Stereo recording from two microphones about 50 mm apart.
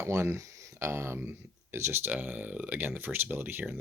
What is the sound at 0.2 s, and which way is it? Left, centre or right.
Speech, right.